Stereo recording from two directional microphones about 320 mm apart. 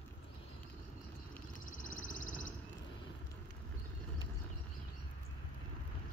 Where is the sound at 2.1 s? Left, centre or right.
Left.